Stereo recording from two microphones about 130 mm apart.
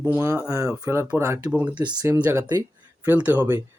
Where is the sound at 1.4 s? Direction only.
10° right (ahead or behind).